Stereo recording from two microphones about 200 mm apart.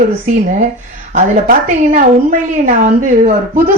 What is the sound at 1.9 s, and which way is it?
Speech, 40° right (ahead or behind).